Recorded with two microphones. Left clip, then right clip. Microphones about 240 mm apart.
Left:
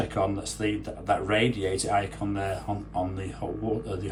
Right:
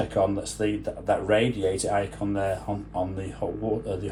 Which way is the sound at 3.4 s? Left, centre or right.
Right.